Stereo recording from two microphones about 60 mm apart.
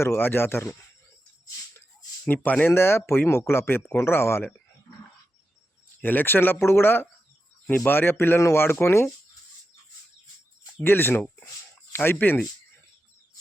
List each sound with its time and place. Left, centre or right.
0.0 s speech: left
2.2 s speech: left
2.6 s speech: left
6.0 s speech: left
10.8 s speech: left